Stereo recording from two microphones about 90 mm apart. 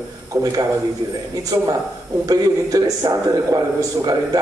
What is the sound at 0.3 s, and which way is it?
Speech, 40° right (ahead or behind).